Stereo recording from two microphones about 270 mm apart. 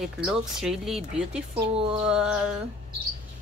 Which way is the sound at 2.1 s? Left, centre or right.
Centre.